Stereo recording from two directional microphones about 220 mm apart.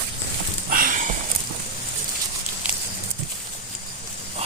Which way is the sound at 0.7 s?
40° right (ahead or behind).